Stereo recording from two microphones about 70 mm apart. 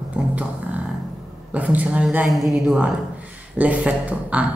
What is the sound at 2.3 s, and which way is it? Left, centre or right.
Speech, centre.